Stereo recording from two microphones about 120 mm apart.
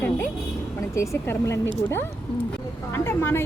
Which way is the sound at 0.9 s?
25° left (ahead or behind).